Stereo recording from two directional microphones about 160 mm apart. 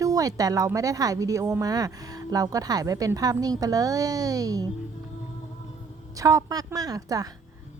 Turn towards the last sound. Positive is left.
turn(degrees=-20)  # may be behind; listen again after turning